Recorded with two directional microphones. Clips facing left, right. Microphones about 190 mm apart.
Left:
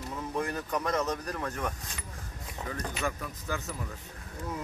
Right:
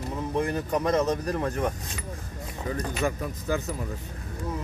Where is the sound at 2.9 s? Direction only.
35° right (ahead or behind).